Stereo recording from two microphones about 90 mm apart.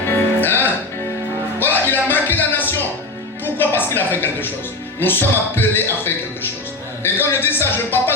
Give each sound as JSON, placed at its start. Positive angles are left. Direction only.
{"t": 0.4, "sound": "music", "side_deg": 25}
{"t": 4.9, "sound": "a man's voice", "side_deg": 25}